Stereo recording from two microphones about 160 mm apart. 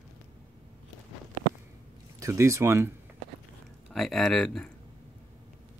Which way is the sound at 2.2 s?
15° right (ahead or behind).